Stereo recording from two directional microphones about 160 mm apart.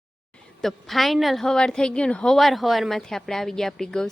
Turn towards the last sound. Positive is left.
turn(degrees=5)  # may be behind; listen again after turning